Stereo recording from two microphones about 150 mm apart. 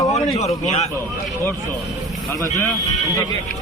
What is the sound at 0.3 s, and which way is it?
Speech, 50° left (ahead or behind).